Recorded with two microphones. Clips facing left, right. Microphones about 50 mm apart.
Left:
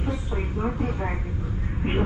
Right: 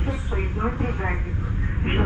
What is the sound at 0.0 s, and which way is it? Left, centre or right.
Vehicle, right.